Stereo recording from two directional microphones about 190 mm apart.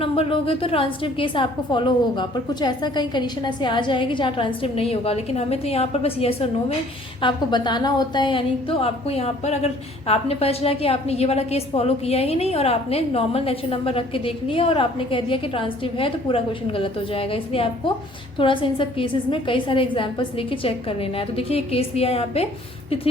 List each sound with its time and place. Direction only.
0.0 s a woman's voice: 30° left (ahead or behind)